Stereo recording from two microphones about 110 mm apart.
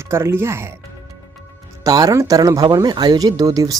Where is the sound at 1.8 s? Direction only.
30° right (ahead or behind).